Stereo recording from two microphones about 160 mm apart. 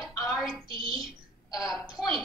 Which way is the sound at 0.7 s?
35° right (ahead or behind).